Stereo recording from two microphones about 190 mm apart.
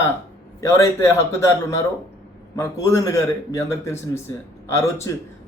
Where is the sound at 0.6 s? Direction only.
15° left (ahead or behind).